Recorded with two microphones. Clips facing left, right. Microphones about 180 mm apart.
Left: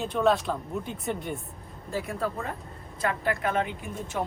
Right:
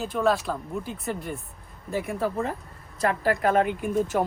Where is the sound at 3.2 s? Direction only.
40° right (ahead or behind).